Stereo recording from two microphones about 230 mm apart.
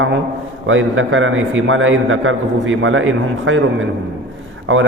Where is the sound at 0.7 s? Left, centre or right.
Right.